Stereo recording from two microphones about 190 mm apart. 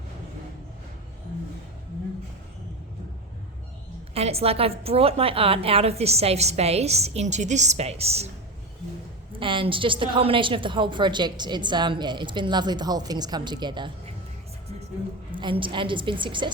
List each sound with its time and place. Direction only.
4.1 s a woman's voice: 30° right (ahead or behind)
9.3 s a woman's voice: 25° right (ahead or behind)
15.3 s a woman's voice: 25° right (ahead or behind)